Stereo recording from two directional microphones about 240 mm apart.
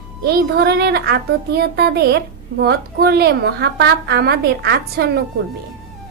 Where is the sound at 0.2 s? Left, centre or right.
Right.